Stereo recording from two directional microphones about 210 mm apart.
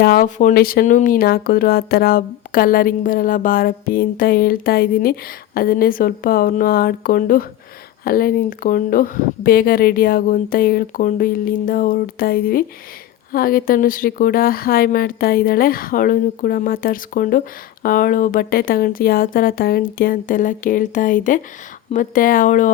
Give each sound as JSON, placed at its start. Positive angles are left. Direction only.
{"t": 0.0, "sound": "speech", "side_deg": 45}